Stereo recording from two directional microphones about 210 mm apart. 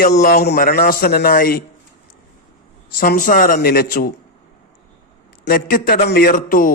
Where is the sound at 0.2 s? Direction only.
45° left (ahead or behind).